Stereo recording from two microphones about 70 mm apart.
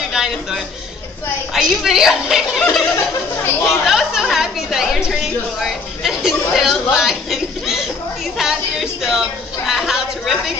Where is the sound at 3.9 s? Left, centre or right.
Centre.